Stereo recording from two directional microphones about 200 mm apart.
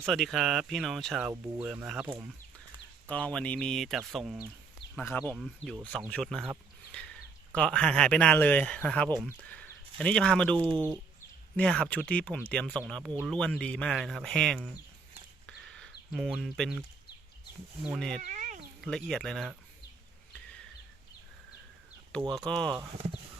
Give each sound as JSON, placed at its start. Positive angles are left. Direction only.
{"t": 0.0, "sound": "speech", "side_deg": 0}
{"t": 3.1, "sound": "speech", "side_deg": 5}
{"t": 15.4, "sound": "a sound", "side_deg": 5}
{"t": 17.8, "sound": "speech", "side_deg": 0}
{"t": 18.2, "sound": "a sound", "side_deg": -35}
{"t": 18.8, "sound": "speech", "side_deg": 0}
{"t": 22.3, "sound": "speech", "side_deg": 5}